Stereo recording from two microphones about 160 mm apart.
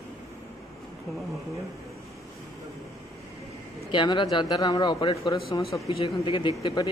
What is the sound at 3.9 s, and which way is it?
Speech, 30° left (ahead or behind).